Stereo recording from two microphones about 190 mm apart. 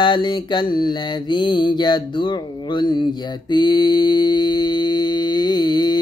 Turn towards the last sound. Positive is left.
turn(degrees=20)  # may be behind; listen again after turning